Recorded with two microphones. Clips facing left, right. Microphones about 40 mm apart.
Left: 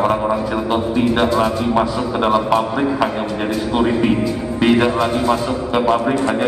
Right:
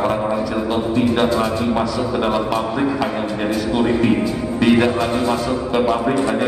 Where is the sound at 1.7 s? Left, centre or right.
Left.